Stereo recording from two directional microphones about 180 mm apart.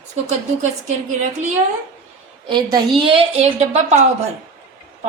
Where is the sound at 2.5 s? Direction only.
25° right (ahead or behind).